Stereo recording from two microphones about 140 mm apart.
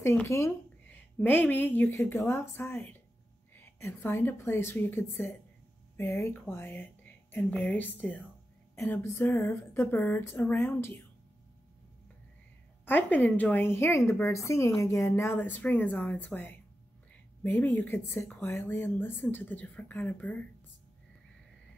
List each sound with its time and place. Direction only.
0.0 s a woman's voice: 15° left (ahead or behind)
12.8 s a woman's voice: 15° left (ahead or behind)